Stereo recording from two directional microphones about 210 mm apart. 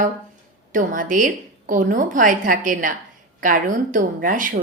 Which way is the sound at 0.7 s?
40° right (ahead or behind).